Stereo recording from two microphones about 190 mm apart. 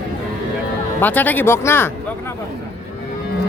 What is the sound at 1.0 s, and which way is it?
Speech, 10° left (ahead or behind).